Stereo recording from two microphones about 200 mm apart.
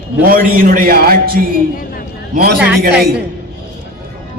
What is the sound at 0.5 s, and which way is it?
A man's voice, 45° right (ahead or behind).